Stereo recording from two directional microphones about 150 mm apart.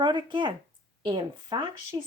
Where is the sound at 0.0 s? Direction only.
30° right (ahead or behind).